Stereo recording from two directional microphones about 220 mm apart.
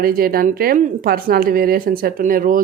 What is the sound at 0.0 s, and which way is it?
Speech, 40° right (ahead or behind).